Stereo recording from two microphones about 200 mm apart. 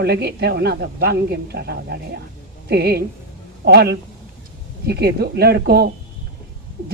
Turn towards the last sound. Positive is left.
turn(degrees=-50)  # may be behind; listen again after turning